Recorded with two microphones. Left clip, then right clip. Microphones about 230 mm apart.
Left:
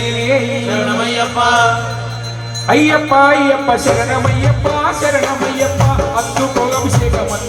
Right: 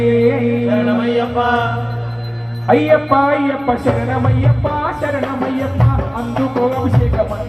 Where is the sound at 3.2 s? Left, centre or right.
Left.